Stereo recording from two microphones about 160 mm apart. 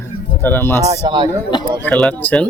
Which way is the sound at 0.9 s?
25° right (ahead or behind).